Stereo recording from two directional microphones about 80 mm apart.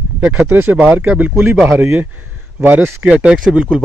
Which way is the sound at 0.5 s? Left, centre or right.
Right.